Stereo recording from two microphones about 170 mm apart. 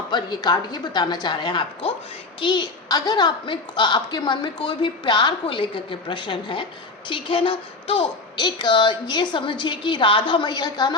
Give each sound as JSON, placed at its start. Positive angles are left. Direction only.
{"t": 0.1, "sound": "a woman's voice", "side_deg": 25}